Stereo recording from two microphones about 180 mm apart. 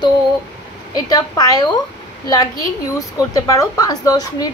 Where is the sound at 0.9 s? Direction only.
20° left (ahead or behind).